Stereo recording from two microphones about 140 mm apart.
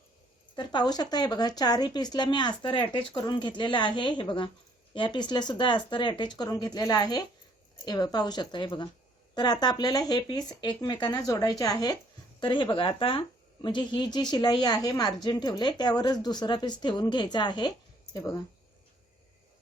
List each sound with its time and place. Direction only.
0.5 s speech: 35° left (ahead or behind)